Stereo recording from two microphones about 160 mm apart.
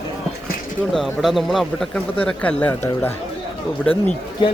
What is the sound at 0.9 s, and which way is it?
Speech, centre (ahead or behind).